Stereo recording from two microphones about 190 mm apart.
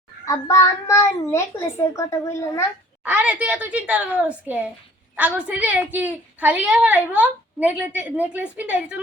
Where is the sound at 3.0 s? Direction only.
10° right (ahead or behind).